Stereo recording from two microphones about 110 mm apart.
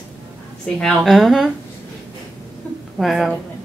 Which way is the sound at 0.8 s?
Centre (ahead or behind).